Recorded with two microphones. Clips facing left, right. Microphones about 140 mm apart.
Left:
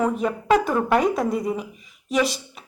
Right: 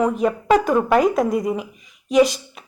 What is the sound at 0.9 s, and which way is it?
A woman's voice, centre (ahead or behind).